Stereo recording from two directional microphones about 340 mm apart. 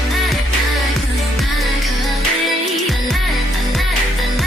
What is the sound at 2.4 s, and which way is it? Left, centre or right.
Music, centre.